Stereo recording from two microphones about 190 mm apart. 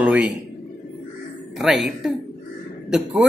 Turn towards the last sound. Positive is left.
turn(degrees=0)  # may be behind; listen again after turning